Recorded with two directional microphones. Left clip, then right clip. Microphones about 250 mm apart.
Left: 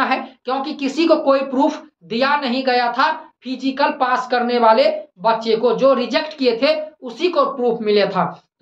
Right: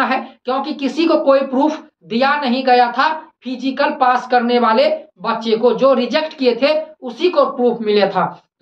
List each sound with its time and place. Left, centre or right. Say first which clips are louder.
0.0 s speech: right 2 dB; centre